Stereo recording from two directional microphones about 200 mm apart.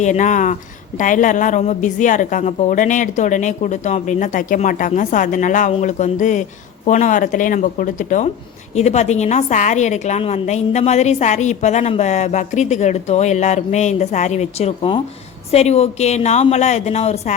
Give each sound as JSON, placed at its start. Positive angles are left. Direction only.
{"t": 0.0, "sound": "a woman's voice", "side_deg": 35}